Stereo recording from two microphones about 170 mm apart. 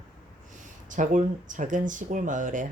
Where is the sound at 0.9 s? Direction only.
50° right (ahead or behind).